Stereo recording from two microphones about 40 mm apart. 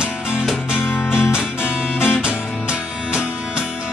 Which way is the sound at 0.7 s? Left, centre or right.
Left.